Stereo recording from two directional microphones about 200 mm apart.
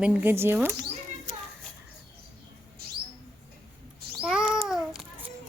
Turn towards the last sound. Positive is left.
turn(degrees=0)  # may be behind; listen again after turning